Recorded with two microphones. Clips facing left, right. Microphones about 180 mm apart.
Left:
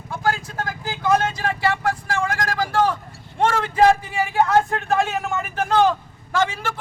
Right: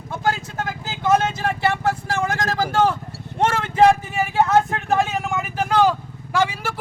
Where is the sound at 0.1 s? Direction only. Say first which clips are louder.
Even; 20° right (ahead or behind).